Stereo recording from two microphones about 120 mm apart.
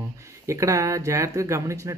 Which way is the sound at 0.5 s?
25° right (ahead or behind).